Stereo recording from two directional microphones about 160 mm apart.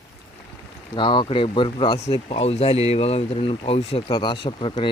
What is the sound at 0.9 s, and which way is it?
Speech, 30° left (ahead or behind).